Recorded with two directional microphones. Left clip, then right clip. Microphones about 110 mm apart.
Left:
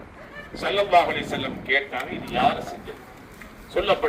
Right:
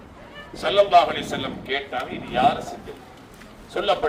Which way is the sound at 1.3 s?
15° right (ahead or behind).